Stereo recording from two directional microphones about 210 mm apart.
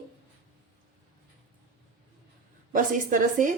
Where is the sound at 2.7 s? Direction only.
40° right (ahead or behind).